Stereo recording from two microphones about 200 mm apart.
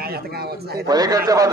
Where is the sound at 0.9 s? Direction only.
20° right (ahead or behind).